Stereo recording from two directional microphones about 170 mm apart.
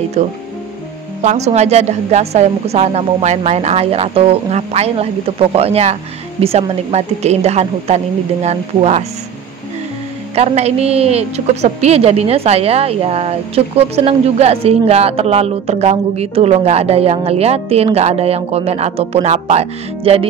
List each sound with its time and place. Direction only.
0.2 s a woman's voice: 40° right (ahead or behind)
10.3 s a woman's voice: 40° right (ahead or behind)